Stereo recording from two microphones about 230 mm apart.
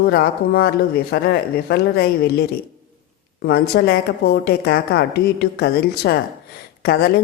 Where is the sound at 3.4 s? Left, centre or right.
Left.